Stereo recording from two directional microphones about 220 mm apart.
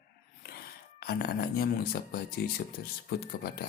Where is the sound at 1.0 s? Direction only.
45° left (ahead or behind).